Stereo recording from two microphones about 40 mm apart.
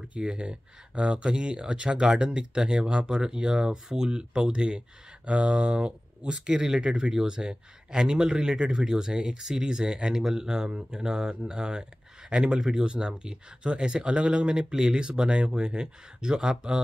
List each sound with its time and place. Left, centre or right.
0.2 s speech: right